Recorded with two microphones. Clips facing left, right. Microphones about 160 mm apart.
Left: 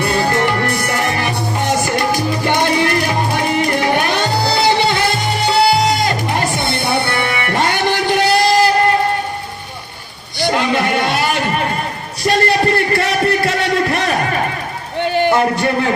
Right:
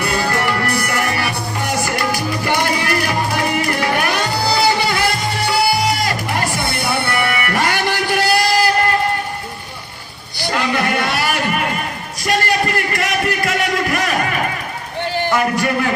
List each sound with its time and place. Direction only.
0.0 s music: 25° left (ahead or behind)
10.4 s music: 20° left (ahead or behind)
12.2 s a sound: 30° left (ahead or behind)
15.3 s music: 25° left (ahead or behind)